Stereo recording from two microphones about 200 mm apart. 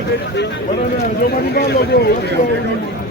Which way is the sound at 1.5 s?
55° left (ahead or behind).